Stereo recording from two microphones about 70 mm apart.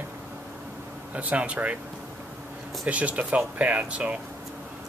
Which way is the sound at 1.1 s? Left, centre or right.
Right.